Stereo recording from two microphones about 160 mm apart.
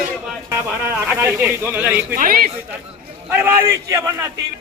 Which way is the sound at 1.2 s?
15° right (ahead or behind).